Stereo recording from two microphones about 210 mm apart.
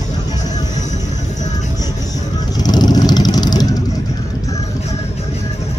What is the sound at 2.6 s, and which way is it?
Vehicle, 20° left (ahead or behind).